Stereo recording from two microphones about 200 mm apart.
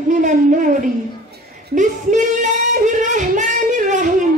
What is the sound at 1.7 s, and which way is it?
Singing, 40° right (ahead or behind).